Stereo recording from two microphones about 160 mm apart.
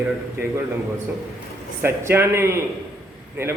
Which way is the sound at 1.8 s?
15° right (ahead or behind).